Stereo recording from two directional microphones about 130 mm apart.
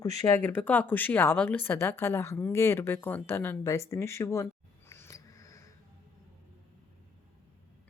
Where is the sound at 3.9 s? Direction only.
20° left (ahead or behind).